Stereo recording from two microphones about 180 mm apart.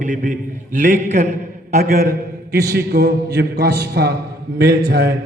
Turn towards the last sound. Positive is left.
turn(degrees=-75)  # may be behind; listen again after turning